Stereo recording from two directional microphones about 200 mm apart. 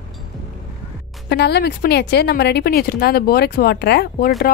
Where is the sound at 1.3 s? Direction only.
55° left (ahead or behind).